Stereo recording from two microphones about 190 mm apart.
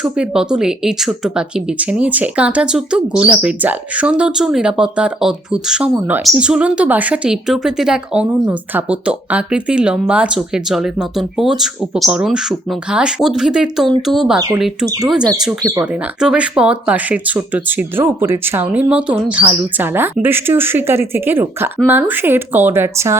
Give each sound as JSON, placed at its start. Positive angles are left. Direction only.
{"t": 0.0, "sound": "speech", "side_deg": -5}
{"t": 15.2, "sound": "speech", "side_deg": -20}
{"t": 15.7, "sound": "speech", "side_deg": -10}